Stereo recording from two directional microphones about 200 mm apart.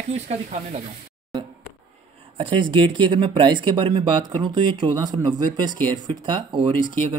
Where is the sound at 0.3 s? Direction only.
35° right (ahead or behind).